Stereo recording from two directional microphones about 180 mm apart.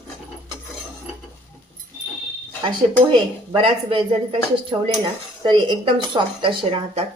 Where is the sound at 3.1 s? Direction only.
30° right (ahead or behind).